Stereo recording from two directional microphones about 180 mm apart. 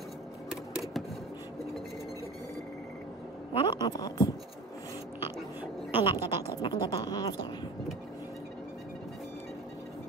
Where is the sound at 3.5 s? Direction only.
25° left (ahead or behind).